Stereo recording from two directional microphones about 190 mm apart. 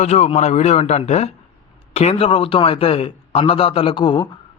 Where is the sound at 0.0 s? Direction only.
35° left (ahead or behind).